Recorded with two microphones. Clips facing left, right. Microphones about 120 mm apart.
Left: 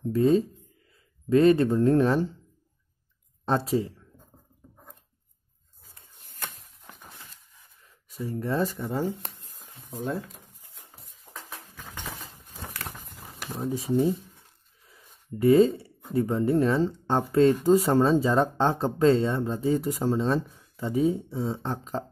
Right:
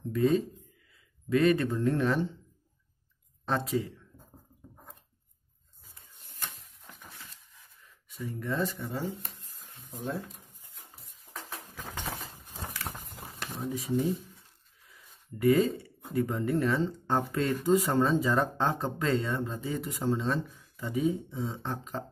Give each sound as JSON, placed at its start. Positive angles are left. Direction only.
{"t": 0.1, "sound": "speech", "side_deg": 30}
{"t": 3.4, "sound": "speech", "side_deg": 30}
{"t": 8.3, "sound": "speech", "side_deg": 35}
{"t": 13.6, "sound": "speech", "side_deg": 30}
{"t": 15.3, "sound": "speech", "side_deg": 30}